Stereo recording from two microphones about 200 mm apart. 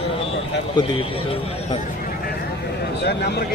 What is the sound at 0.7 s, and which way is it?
A man's voice, 25° left (ahead or behind).